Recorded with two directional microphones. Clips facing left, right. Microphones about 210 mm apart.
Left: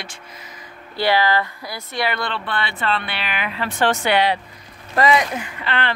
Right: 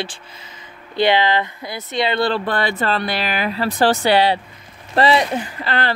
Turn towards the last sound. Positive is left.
turn(degrees=-40)  # may be behind; listen again after turning